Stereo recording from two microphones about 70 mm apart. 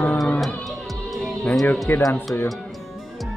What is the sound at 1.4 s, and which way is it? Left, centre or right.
Speech, centre.